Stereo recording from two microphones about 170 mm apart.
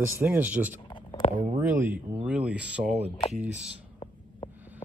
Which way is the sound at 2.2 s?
5° right (ahead or behind).